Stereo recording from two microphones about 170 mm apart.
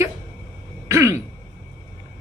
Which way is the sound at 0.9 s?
15° right (ahead or behind).